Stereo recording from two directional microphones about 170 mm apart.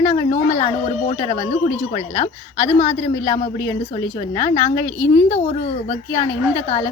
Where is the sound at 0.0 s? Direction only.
40° left (ahead or behind).